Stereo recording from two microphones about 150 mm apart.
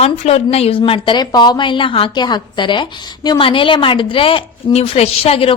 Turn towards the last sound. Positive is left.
turn(degrees=40)  # may be behind; listen again after turning